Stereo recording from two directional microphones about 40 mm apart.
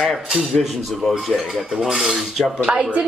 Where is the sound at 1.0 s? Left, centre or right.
Centre.